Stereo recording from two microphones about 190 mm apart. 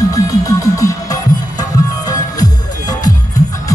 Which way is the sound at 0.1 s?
20° left (ahead or behind).